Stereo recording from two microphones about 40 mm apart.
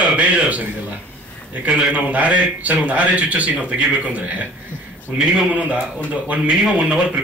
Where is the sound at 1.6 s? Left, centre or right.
Right.